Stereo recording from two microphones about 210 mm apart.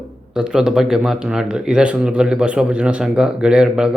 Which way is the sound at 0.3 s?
5° right (ahead or behind).